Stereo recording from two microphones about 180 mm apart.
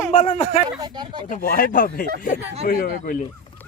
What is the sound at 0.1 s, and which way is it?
Speech, 45° left (ahead or behind).